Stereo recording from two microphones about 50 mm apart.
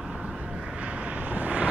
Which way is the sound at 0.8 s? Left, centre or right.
Right.